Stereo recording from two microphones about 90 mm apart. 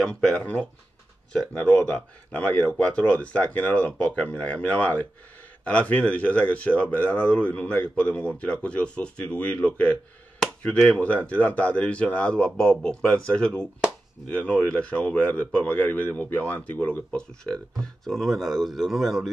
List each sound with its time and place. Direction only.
0.0 s speech: 10° left (ahead or behind)
18.0 s speech: centre (ahead or behind)